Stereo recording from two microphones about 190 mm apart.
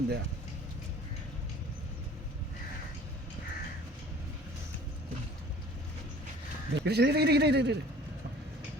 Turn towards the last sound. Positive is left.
turn(degrees=-60)  # may be behind; listen again after turning